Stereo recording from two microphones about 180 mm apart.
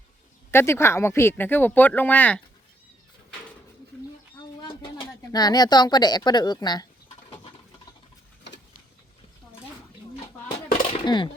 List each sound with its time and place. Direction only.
0.5 s speech: 15° left (ahead or behind)
4.6 s speech: 25° left (ahead or behind)
10.9 s a sound: 25° left (ahead or behind)